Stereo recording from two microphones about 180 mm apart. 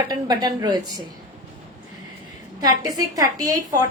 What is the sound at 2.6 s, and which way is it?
A woman's voice, 20° right (ahead or behind).